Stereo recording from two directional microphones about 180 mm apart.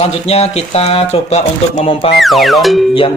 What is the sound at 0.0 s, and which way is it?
Speech, 35° left (ahead or behind).